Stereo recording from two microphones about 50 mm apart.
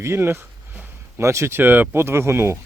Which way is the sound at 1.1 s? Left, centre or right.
Right.